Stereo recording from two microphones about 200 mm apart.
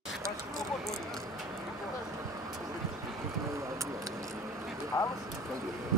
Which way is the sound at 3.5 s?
15° right (ahead or behind).